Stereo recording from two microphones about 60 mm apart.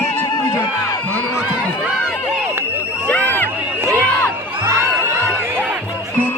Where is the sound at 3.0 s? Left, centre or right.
Left.